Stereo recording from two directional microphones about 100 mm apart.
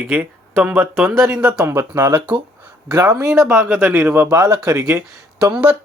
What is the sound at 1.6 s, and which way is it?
Speech, 25° right (ahead or behind).